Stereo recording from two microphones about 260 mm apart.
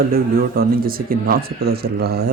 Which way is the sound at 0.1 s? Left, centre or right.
Right.